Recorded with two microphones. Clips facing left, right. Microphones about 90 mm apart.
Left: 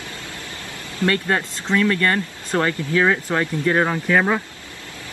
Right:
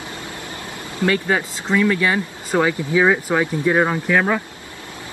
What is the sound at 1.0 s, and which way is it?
Speech, 5° right (ahead or behind).